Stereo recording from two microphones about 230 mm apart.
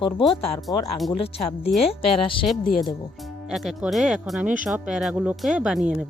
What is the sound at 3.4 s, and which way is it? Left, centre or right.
Speech, centre.